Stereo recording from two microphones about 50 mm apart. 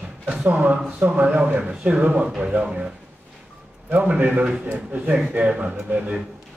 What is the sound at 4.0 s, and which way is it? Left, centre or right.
A man's voice, right.